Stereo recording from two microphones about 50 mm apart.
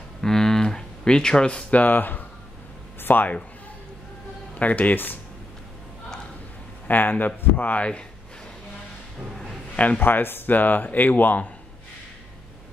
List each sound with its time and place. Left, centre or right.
0.2 s speech: centre; by 2.2 s left
3.0 s a sound: left
4.6 s speech: left
6.9 s speech: left
9.9 s speech: left